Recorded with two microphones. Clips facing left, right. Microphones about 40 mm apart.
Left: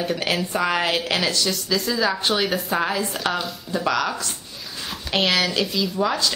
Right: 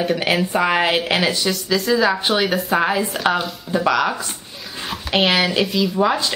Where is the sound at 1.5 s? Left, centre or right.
Centre.